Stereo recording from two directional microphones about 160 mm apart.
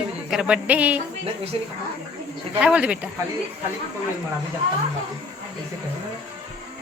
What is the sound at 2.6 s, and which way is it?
Speech, 5° right (ahead or behind).